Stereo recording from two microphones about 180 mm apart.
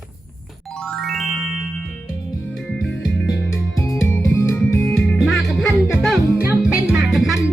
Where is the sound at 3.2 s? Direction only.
15° left (ahead or behind).